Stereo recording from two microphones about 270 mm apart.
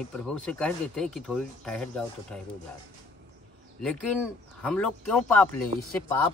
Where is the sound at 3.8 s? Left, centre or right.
Centre.